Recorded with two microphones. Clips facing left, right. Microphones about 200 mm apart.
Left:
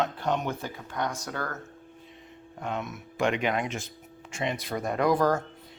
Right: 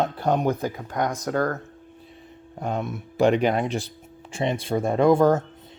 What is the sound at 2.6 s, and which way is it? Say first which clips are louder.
Speech: right 5 dB; 35° right (ahead or behind).